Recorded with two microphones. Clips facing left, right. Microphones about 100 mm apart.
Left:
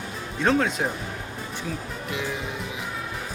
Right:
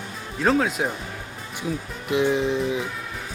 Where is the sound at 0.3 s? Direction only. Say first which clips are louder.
Right 1 dB; centre (ahead or behind).